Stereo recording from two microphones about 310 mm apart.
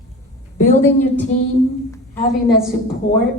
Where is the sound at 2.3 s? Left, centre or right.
Centre.